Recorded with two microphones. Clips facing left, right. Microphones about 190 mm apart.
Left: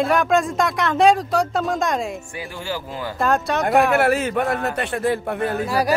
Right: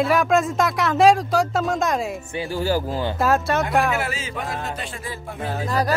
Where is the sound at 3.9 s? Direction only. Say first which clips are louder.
Left 9 dB; 60° left (ahead or behind).